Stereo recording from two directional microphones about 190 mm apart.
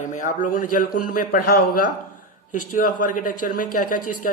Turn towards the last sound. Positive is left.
turn(degrees=45)  # may be behind; listen again after turning